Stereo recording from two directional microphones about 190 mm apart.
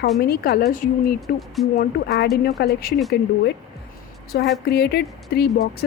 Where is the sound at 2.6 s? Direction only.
60° left (ahead or behind).